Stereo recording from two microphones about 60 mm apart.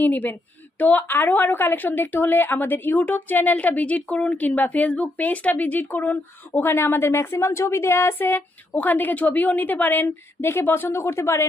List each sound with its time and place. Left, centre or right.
0.0 s a woman's voice: left